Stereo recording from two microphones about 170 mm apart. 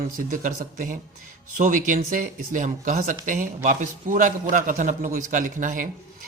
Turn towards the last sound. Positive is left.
turn(degrees=-50)  # may be behind; listen again after turning